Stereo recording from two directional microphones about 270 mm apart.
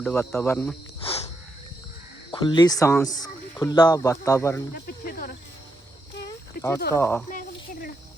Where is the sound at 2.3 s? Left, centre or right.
Centre.